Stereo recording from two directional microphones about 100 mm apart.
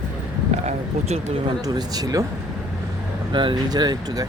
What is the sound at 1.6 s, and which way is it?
Speech, 40° right (ahead or behind).